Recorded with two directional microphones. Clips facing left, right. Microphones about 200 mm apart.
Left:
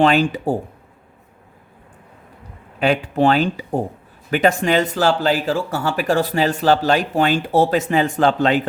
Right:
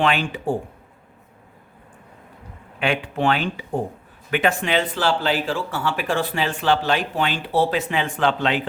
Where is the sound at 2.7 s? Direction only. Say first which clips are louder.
Left 6 dB; 40° left (ahead or behind).